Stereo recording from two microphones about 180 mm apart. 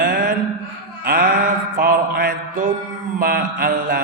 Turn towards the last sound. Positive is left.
turn(degrees=-55)  # may be behind; listen again after turning